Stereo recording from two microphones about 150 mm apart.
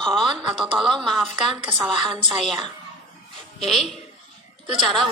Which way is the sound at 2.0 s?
35° right (ahead or behind).